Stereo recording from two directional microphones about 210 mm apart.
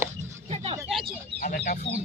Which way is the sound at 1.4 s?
40° left (ahead or behind).